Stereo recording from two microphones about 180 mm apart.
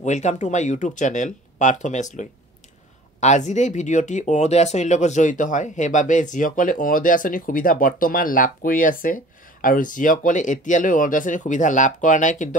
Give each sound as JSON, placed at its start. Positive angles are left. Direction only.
{"t": 0.0, "sound": "speech", "side_deg": 40}